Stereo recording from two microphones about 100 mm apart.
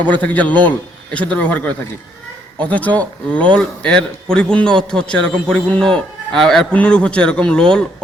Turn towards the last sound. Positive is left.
turn(degrees=10)  # may be behind; listen again after turning